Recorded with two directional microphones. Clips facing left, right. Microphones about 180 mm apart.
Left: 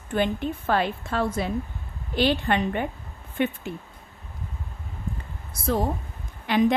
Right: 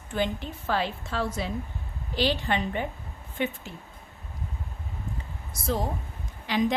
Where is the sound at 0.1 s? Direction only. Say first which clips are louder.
Left 4 dB; 55° left (ahead or behind).